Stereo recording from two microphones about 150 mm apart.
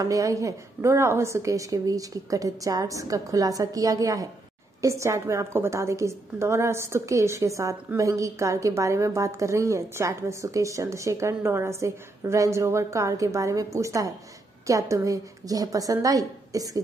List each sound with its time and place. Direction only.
0.0 s a woman's voice: 20° right (ahead or behind)